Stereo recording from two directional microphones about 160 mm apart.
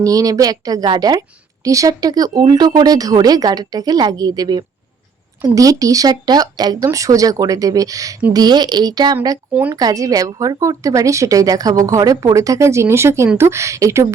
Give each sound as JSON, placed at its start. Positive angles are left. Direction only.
{"t": 0.0, "sound": "speech", "side_deg": -20}